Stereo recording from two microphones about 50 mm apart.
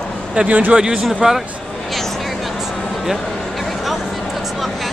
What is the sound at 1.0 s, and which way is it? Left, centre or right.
Speech, centre.